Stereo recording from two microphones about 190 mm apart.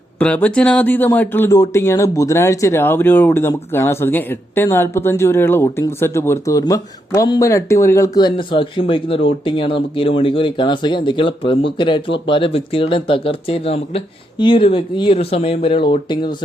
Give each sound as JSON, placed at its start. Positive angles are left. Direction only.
{"t": 0.2, "sound": "speech", "side_deg": 5}